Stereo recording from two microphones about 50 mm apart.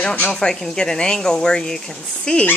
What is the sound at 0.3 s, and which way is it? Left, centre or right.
Speech, centre.